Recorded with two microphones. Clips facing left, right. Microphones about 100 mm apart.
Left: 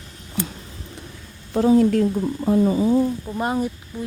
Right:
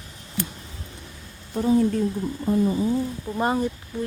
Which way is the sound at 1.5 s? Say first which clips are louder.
Left 5 dB; 80° left.